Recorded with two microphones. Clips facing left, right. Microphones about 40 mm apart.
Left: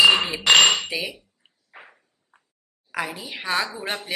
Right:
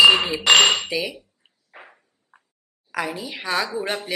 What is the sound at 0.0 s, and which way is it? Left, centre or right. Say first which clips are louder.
Dishes: right 2 dB; centre.